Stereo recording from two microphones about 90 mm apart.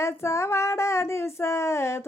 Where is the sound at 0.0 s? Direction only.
30° left (ahead or behind).